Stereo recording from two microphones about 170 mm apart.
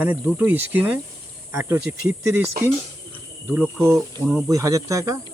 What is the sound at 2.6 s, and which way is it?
Speech, 60° right (ahead or behind).